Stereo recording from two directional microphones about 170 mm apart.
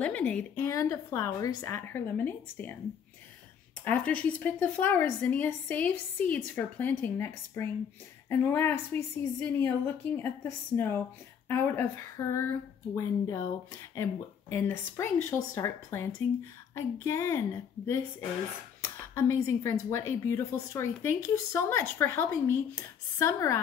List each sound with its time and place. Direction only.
0.0 s speech: 10° left (ahead or behind)
3.8 s speech: 10° left (ahead or behind)
14.5 s speech: 15° left (ahead or behind)